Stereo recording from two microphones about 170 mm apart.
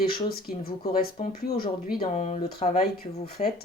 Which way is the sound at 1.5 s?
60° left (ahead or behind).